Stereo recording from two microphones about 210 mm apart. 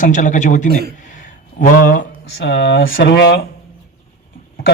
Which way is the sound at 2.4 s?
55° left (ahead or behind).